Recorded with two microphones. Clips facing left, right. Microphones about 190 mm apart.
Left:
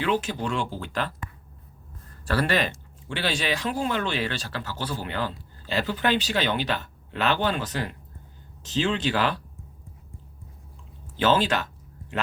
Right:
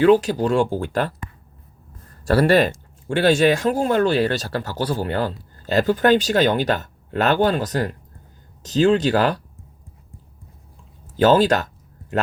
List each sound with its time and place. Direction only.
0.0 s speech: 40° right (ahead or behind)
2.2 s speech: 40° right (ahead or behind)
11.2 s speech: 40° right (ahead or behind)